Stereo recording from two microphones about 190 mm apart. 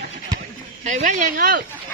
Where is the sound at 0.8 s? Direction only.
40° right (ahead or behind).